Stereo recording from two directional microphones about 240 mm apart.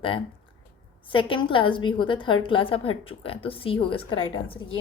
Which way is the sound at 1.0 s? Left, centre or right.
Left.